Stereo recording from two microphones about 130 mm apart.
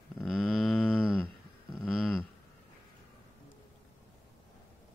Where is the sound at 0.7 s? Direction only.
10° left (ahead or behind).